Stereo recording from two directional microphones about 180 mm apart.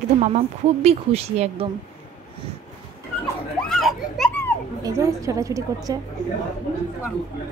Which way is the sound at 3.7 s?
Centre (ahead or behind).